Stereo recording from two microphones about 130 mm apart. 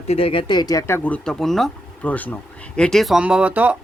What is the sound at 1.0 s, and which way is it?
Speech, 10° left (ahead or behind).